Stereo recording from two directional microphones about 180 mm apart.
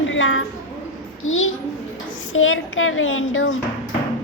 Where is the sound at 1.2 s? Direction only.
90° left.